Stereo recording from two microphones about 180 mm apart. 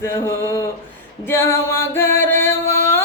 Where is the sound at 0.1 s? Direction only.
15° left (ahead or behind).